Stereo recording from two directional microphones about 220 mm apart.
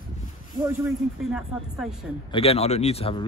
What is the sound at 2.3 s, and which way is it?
Speech, 25° left (ahead or behind).